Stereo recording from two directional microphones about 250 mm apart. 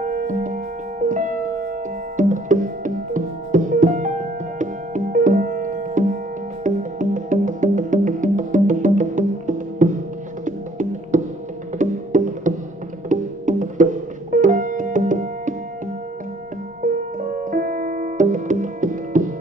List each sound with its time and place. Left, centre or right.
0.0 s music: right
16.8 s music: right